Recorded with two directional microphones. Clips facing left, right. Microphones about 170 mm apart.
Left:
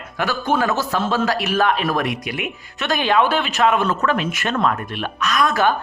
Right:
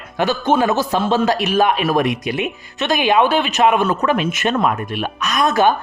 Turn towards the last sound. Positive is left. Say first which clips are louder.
# right 3 dB
turn(degrees=-20)  # may be behind; listen again after turning